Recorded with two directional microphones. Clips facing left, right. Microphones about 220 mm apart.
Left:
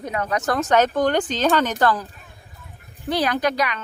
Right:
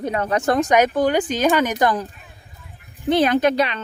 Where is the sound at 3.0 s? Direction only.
25° right (ahead or behind).